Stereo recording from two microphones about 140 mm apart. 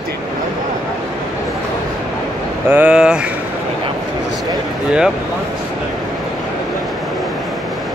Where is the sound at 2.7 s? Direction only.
10° right (ahead or behind).